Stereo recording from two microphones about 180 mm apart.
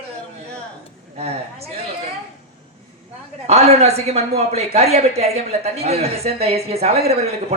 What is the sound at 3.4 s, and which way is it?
A man's voice, 35° right (ahead or behind).